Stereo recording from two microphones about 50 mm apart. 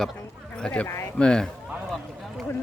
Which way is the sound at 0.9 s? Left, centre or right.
Left.